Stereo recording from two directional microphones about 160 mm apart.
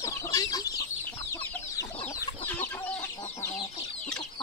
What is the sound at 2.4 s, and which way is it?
Chicken, 10° left (ahead or behind).